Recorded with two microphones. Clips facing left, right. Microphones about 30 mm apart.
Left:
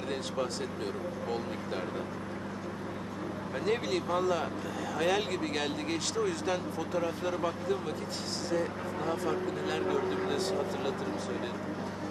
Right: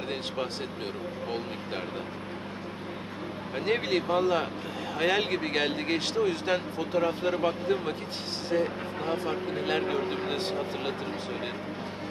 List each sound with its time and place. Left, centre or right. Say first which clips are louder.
3.5 s speech: right 4 dB; right